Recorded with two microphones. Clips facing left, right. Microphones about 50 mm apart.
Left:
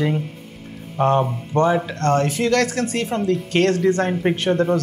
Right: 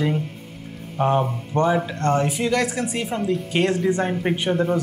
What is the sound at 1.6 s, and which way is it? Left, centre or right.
Speech, centre.